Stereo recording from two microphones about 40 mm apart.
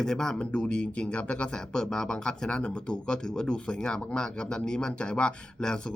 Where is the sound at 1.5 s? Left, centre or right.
Centre.